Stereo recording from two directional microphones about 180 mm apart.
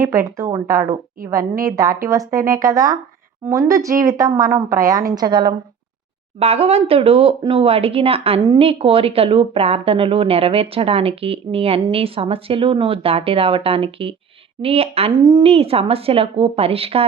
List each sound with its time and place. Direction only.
0.3 s a woman's voice: 15° right (ahead or behind)
6.4 s speech: 35° right (ahead or behind)